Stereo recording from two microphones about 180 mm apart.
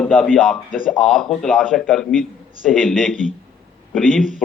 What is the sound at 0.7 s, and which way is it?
Speech, 50° left (ahead or behind).